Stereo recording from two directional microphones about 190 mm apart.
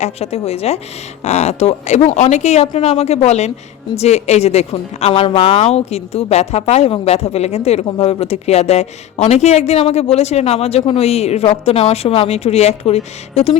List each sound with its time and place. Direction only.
0.0 s a woman's voice: 35° left (ahead or behind)